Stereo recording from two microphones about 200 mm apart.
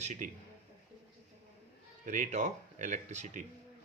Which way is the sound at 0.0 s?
35° right (ahead or behind).